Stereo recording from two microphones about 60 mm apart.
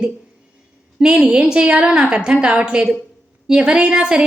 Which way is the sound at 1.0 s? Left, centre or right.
Centre.